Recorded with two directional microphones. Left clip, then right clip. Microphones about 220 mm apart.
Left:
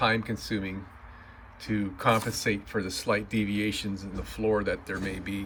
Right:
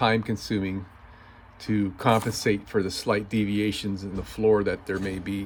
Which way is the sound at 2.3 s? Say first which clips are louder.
Right 4 dB; 50° right (ahead or behind).